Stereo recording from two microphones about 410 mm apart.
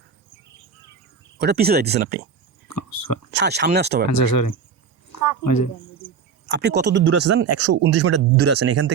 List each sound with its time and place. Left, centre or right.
1.4 s speech: right
2.6 s speech: left
3.3 s speech: right
4.1 s speech: left
5.1 s a sound: left
6.5 s speech: right